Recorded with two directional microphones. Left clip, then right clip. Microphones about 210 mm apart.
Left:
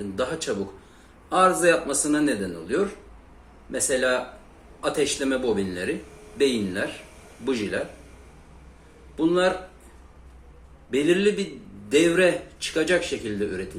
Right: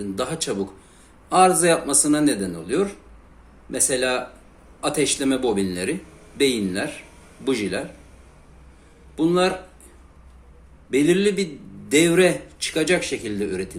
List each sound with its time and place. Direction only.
0.2 s speech: 35° right (ahead or behind)
9.1 s speech: 40° right (ahead or behind)
10.9 s speech: 40° right (ahead or behind)